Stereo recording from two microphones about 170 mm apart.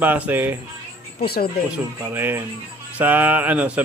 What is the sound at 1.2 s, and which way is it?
Speech, 65° left (ahead or behind).